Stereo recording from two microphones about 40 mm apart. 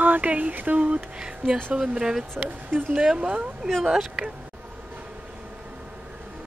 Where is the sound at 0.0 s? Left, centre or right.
Right.